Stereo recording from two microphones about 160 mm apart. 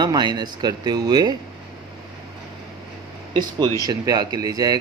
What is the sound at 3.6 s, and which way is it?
Speech, 25° right (ahead or behind).